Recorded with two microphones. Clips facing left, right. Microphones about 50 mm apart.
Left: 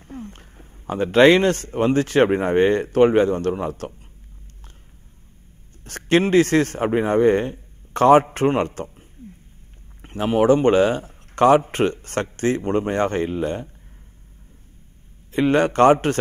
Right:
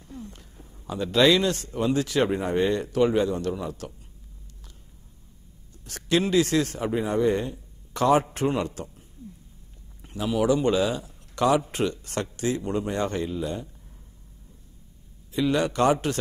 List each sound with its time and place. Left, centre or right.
0.0 s speech: left
5.9 s a man's voice: left
10.0 s speech: left
15.3 s speech: left